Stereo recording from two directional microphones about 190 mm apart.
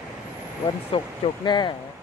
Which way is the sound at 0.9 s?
25° left (ahead or behind).